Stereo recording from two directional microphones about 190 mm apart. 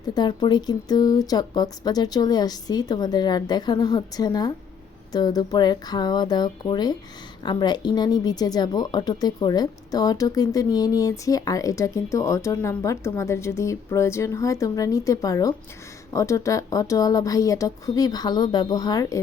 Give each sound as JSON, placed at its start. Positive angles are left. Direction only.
{"t": 0.0, "sound": "speech", "side_deg": 20}